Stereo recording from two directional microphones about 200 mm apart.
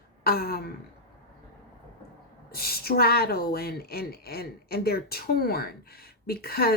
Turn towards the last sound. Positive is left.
turn(degrees=50)  # may be behind; listen again after turning